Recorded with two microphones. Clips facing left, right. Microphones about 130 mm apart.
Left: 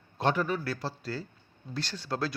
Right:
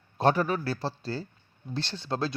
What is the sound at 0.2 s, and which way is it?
Speech, 40° right (ahead or behind).